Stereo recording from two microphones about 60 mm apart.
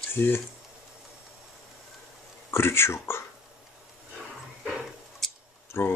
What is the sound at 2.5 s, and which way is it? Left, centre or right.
Speech, left.